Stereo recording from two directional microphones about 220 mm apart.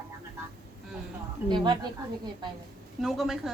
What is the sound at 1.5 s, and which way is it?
Speech, 20° right (ahead or behind).